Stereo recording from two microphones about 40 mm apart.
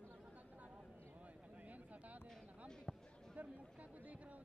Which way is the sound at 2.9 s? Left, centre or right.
Centre.